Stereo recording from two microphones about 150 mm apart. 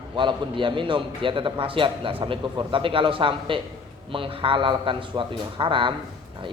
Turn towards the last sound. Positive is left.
turn(degrees=-35)  # may be behind; listen again after turning